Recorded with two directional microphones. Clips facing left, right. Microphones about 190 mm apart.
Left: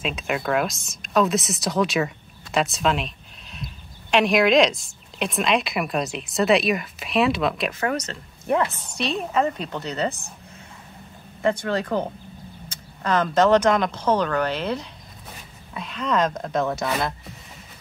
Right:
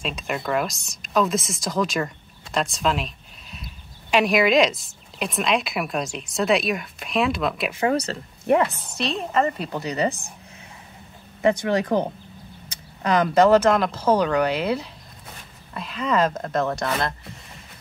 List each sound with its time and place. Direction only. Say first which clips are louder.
0.0 s speech: left 2 dB; centre (ahead or behind)
7.9 s speech: right 4 dB; 30° right (ahead or behind)
8.9 s speech: even; centre (ahead or behind)
11.4 s speech: right 3 dB; 15° right (ahead or behind); by 17.3 s centre (ahead or behind)